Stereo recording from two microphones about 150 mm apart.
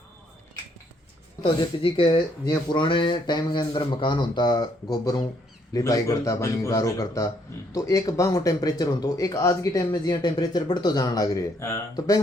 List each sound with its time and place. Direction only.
1.4 s speech: 35° left (ahead or behind)